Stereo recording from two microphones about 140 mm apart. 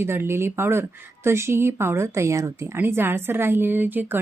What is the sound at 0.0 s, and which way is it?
A woman's voice, 15° right (ahead or behind).